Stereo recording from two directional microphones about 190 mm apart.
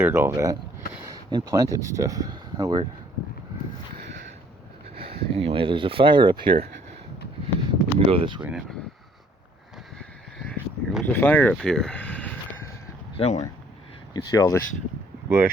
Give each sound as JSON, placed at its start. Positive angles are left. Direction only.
{"t": 0.0, "sound": "speech", "side_deg": -15}
{"t": 4.9, "sound": "speech", "side_deg": -30}
{"t": 7.7, "sound": "a sound", "side_deg": -30}
{"t": 8.4, "sound": "speech", "side_deg": -10}
{"t": 10.0, "sound": "a sound", "side_deg": 5}
{"t": 13.1, "sound": "speech", "side_deg": 35}
{"t": 14.1, "sound": "speech", "side_deg": 20}